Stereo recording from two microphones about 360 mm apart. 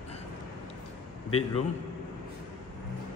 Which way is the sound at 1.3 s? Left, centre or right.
Left.